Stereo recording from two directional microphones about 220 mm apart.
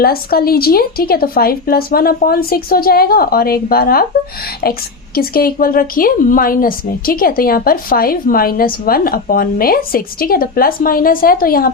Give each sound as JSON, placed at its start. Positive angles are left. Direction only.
{"t": 0.0, "sound": "speech", "side_deg": 45}
{"t": 5.1, "sound": "a woman's voice", "side_deg": 40}